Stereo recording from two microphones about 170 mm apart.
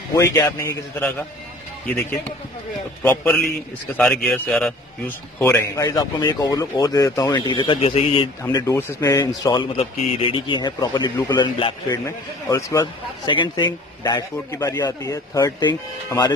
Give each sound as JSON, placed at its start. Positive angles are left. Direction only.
{"t": 0.1, "sound": "a man's voice", "side_deg": 20}
{"t": 3.0, "sound": "a man's voice", "side_deg": 10}
{"t": 5.4, "sound": "a man's voice", "side_deg": 15}
{"t": 8.4, "sound": "a man's voice", "side_deg": 20}
{"t": 12.4, "sound": "a man's voice", "side_deg": 20}